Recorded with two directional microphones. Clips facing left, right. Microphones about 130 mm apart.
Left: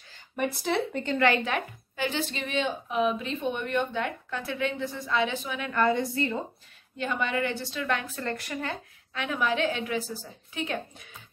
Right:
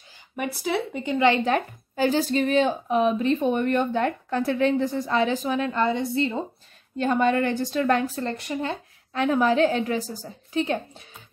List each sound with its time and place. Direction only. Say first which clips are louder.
0.4 s speech: right 1 dB; 5° right (ahead or behind)
1.4 s speech: right 7 dB; 40° right (ahead or behind)
5.7 s a woman's voice: right 1 dB; 25° right (ahead or behind)
7.0 s speech: right 7 dB; 40° right (ahead or behind)
8.2 s a woman's voice: right 5 dB; 25° right (ahead or behind)
9.1 s speech: right 8 dB; 40° right (ahead or behind)